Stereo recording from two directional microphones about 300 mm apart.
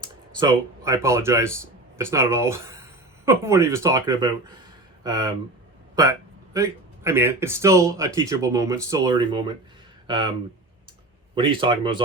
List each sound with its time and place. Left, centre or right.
0.3 s speech: centre
11.3 s speech: centre